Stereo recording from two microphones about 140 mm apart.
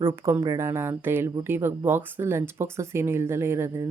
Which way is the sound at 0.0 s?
15° right (ahead or behind).